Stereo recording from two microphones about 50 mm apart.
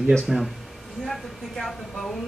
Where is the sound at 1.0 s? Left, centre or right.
Centre.